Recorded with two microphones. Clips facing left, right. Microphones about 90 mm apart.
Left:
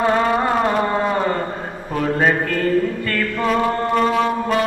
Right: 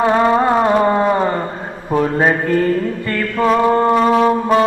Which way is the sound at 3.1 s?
30° right (ahead or behind).